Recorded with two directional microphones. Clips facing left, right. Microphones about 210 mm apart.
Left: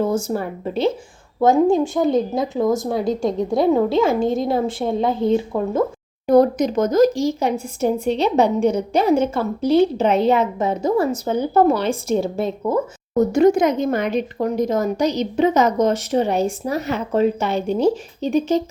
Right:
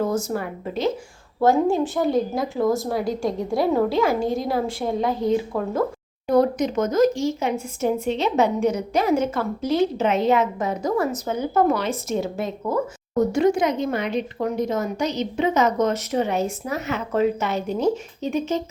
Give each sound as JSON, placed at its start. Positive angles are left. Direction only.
{"t": 0.0, "sound": "speech", "side_deg": 30}
{"t": 1.7, "sound": "a woman's voice", "side_deg": 15}
{"t": 6.2, "sound": "speech", "side_deg": 40}
{"t": 13.3, "sound": "speech", "side_deg": 45}